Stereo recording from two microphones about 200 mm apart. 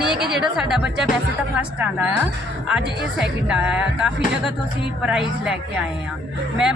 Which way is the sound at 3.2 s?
5° right (ahead or behind).